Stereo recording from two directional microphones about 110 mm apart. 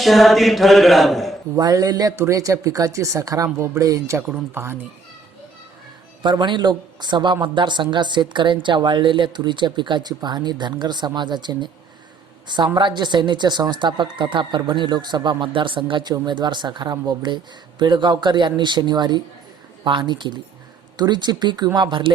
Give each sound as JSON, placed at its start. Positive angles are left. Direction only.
{"t": 0.0, "sound": "mantra", "side_deg": 0}
{"t": 1.5, "sound": "speech", "side_deg": -35}
{"t": 6.2, "sound": "speech", "side_deg": -45}